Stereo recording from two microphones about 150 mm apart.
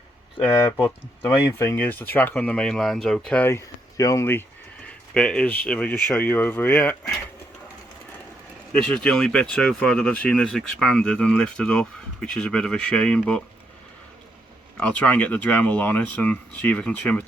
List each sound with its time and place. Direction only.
0.8 s speech: 15° left (ahead or behind)
8.7 s speech: 5° left (ahead or behind)
14.8 s speech: 10° left (ahead or behind)